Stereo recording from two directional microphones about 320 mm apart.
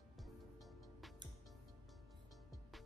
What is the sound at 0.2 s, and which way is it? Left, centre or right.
Music, centre.